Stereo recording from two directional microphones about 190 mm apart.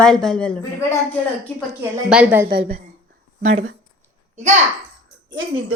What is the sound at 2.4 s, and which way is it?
Speech, 55° right (ahead or behind).